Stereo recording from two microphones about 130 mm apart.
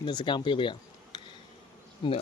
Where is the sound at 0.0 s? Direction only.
35° left (ahead or behind).